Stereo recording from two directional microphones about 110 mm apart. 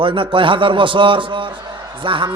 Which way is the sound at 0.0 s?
50° right (ahead or behind).